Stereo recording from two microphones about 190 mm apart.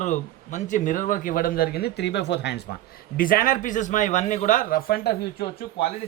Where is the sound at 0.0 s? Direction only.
40° left (ahead or behind); by 2.6 s 65° left (ahead or behind).